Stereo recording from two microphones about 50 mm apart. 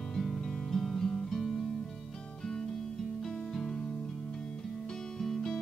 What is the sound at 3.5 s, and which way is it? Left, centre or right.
Music, centre.